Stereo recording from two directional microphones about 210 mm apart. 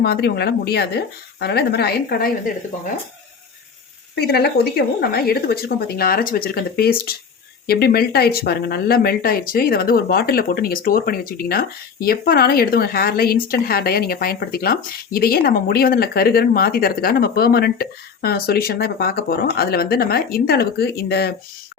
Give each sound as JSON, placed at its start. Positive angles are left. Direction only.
{"t": 0.0, "sound": "speech", "side_deg": 50}
{"t": 4.1, "sound": "speech", "side_deg": 50}